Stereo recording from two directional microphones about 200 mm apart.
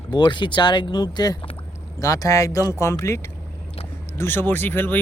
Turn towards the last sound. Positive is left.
turn(degrees=10)  # may be behind; listen again after turning